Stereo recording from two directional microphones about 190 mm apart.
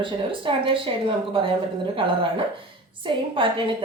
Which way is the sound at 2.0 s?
25° right (ahead or behind).